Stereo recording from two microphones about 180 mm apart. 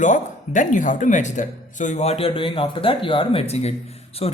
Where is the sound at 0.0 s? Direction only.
45° left (ahead or behind).